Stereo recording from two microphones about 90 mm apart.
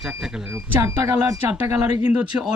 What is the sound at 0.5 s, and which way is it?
Speech, 25° right (ahead or behind).